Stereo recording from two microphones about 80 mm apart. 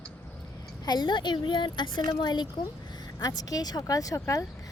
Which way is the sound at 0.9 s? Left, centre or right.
Left.